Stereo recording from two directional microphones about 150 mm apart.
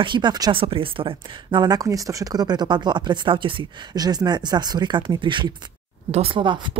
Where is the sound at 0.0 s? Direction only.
30° right (ahead or behind).